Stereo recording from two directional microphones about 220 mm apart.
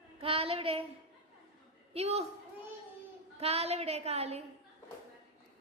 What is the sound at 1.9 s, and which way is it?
Speech, 30° right (ahead or behind).